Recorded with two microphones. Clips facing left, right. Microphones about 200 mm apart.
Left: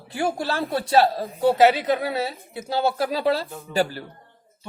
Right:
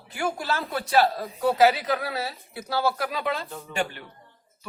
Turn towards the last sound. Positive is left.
turn(degrees=35)  # may be behind; listen again after turning